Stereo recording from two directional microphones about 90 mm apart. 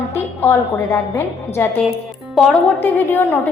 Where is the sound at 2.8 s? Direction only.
20° left (ahead or behind).